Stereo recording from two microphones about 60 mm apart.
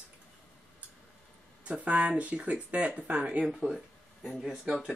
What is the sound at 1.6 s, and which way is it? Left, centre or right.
Speech, right.